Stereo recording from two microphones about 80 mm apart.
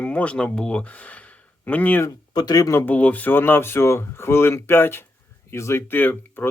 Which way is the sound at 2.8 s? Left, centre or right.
Centre.